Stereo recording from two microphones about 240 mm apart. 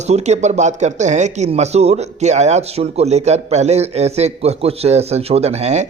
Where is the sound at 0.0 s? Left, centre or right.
Right.